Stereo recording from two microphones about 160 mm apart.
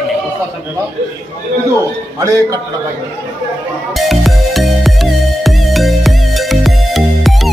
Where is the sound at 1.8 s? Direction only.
20° right (ahead or behind).